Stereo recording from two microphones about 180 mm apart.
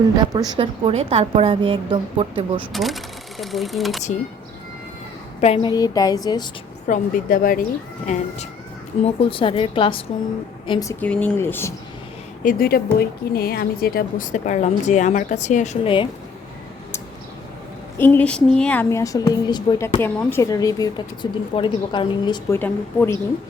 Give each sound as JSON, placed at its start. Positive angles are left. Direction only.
{"t": 0.2, "sound": "a woman's voice", "side_deg": -20}
{"t": 2.7, "sound": "speech", "side_deg": 0}
{"t": 5.6, "sound": "a woman's voice", "side_deg": 20}
{"t": 6.8, "sound": "a woman's voice", "side_deg": 50}
{"t": 8.0, "sound": "a woman's voice", "side_deg": 40}
{"t": 11.0, "sound": "a woman's voice", "side_deg": 5}
{"t": 12.4, "sound": "a woman's voice", "side_deg": 50}
{"t": 17.9, "sound": "a woman's voice", "side_deg": 10}
{"t": 20.0, "sound": "a woman's voice", "side_deg": 10}
{"t": 22.5, "sound": "a woman's voice", "side_deg": 10}